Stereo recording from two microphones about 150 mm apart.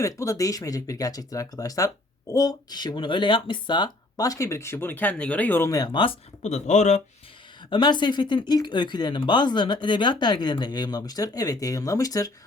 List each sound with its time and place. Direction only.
0.0 s speech: 20° left (ahead or behind)
6.4 s speech: 50° left (ahead or behind)
7.7 s speech: 30° left (ahead or behind)